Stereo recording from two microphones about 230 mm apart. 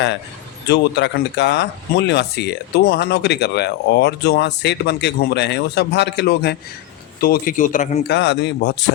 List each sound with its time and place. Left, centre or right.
0.7 s speech: left
8.1 s speech: left